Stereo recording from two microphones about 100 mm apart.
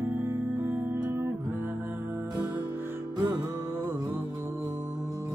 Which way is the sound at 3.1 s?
45° right (ahead or behind).